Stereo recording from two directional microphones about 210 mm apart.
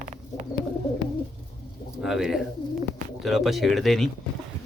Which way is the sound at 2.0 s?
Centre (ahead or behind).